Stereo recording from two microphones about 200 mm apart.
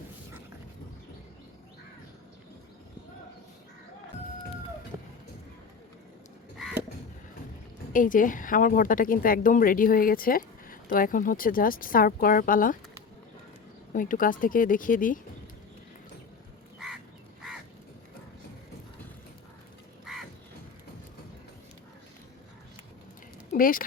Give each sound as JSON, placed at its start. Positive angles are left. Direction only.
{"t": 7.9, "sound": "a woman's voice", "side_deg": 45}
{"t": 13.9, "sound": "a woman's voice", "side_deg": 40}
{"t": 23.5, "sound": "a sound", "side_deg": 45}